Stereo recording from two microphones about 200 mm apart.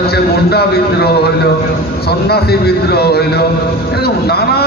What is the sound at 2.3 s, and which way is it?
A man's voice, 55° left (ahead or behind).